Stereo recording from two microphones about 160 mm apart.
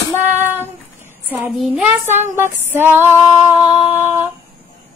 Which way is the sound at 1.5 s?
5° right (ahead or behind).